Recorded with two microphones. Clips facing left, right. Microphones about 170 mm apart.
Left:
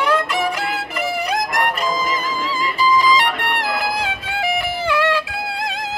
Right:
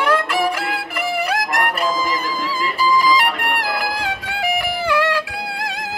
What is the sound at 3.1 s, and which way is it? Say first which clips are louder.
Music: even; 10° right (ahead or behind).